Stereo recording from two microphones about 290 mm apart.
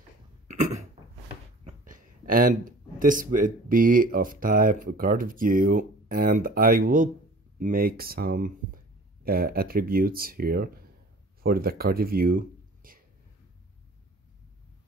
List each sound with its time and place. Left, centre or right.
0.5 s cough: right
1.6 s speech: right